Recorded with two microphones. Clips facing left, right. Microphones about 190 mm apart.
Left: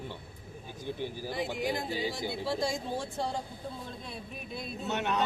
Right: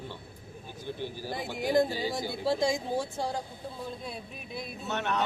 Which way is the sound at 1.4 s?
45° right (ahead or behind).